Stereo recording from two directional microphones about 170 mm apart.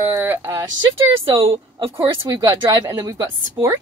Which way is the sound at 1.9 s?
20° right (ahead or behind).